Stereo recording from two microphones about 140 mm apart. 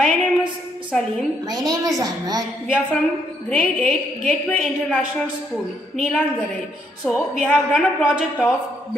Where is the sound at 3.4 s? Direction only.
5° left (ahead or behind).